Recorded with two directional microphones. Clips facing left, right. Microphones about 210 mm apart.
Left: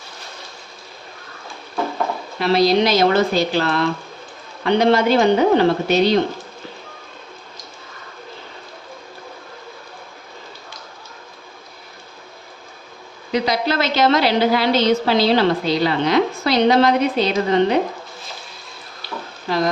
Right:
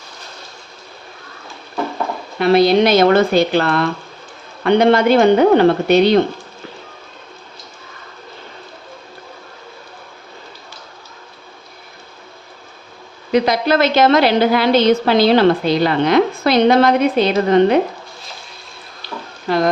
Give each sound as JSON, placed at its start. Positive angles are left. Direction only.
{"t": 2.4, "sound": "a woman's voice", "side_deg": -55}
{"t": 13.3, "sound": "a woman's voice", "side_deg": -55}